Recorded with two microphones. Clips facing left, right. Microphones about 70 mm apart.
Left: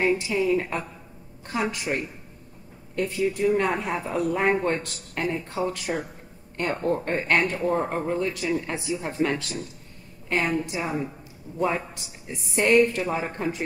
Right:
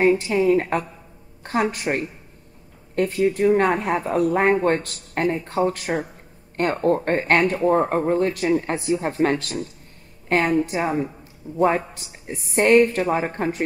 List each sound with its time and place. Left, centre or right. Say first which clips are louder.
0.2 s a woman's voice: right 5 dB; right